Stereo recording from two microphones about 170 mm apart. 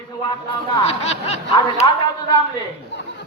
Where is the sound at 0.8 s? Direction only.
40° left (ahead or behind).